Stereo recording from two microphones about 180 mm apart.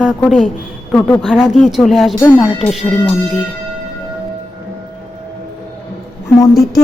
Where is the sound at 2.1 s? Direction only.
10° left (ahead or behind).